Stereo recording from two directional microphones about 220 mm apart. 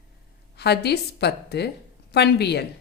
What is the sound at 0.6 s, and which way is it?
Speech, 50° left (ahead or behind).